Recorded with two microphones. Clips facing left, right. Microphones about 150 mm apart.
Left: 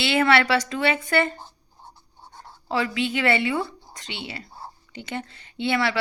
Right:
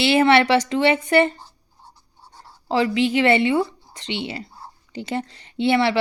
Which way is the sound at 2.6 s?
25° right (ahead or behind).